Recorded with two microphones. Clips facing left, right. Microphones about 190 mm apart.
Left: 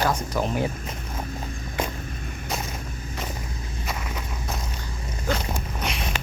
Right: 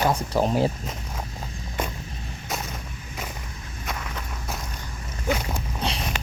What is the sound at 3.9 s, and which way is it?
Walk, 10° left (ahead or behind).